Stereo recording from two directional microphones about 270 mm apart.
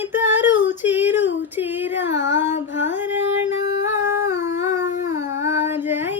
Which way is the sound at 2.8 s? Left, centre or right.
Centre.